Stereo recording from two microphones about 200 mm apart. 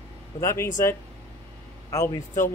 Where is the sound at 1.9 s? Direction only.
15° left (ahead or behind).